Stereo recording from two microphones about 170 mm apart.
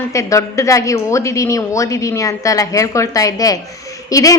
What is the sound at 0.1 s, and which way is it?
A woman's voice, 20° left (ahead or behind).